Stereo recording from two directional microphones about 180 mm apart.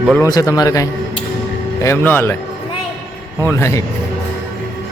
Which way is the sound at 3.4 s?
15° left (ahead or behind).